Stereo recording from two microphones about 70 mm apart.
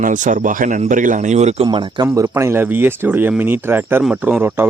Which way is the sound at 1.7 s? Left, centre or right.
Right.